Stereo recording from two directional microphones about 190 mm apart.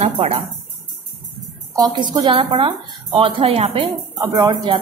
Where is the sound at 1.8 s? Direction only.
25° right (ahead or behind).